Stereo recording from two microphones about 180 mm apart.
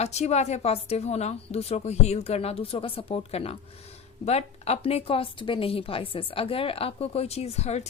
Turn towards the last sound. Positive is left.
turn(degrees=35)  # may be behind; listen again after turning